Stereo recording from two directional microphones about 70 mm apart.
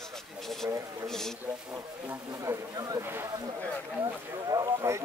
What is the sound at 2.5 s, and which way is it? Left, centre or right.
Speech, right.